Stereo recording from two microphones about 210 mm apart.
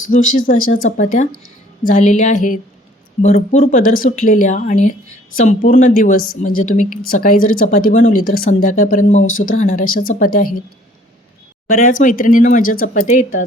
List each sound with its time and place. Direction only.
0.1 s speech: 40° left (ahead or behind)
0.6 s speech: 75° left (ahead or behind)
0.9 s speech: 35° left (ahead or behind)
11.7 s speech: 40° left (ahead or behind)